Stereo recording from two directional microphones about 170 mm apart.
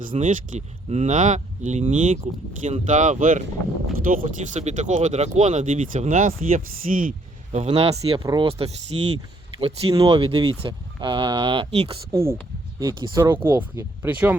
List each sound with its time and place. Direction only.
0.2 s speech: 50° right (ahead or behind)
7.5 s speech: 35° right (ahead or behind)
12.1 s speech: 15° right (ahead or behind)